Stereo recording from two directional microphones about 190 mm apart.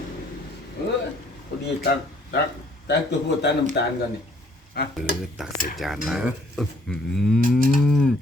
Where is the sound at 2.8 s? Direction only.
65° left (ahead or behind).